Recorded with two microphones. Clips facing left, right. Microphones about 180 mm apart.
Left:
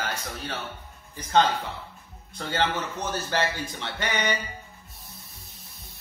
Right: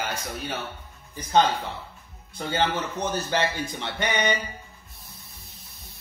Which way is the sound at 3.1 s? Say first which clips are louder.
Right 1 dB; 15° right (ahead or behind).